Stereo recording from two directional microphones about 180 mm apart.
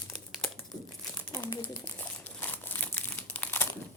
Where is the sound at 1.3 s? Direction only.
25° left (ahead or behind).